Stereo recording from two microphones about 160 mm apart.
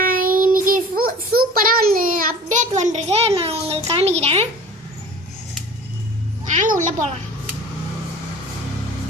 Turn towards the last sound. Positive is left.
turn(degrees=-50)  # may be behind; listen again after turning